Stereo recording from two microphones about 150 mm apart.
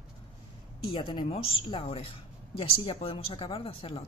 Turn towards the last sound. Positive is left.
turn(degrees=40)  # may be behind; listen again after turning